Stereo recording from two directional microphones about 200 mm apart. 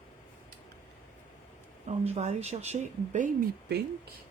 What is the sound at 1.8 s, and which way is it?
Speech, 35° right (ahead or behind).